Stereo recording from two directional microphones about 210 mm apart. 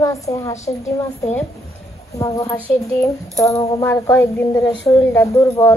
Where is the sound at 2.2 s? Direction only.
15° left (ahead or behind).